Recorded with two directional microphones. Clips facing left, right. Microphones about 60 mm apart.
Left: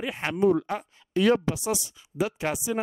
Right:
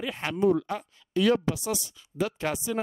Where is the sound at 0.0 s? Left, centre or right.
Centre.